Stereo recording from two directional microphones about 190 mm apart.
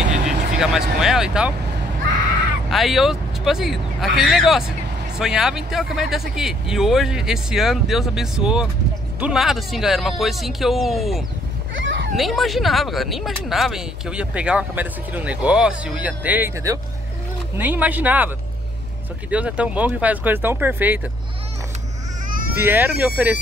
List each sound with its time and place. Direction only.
0.6 s speech: centre (ahead or behind)
2.7 s speech: centre (ahead or behind)
11.7 s a sound: 75° right (ahead or behind)
12.2 s speech: centre (ahead or behind)
19.3 s speech: 5° right (ahead or behind)
22.3 s baby cry: 50° right (ahead or behind)
22.6 s speech: 10° right (ahead or behind)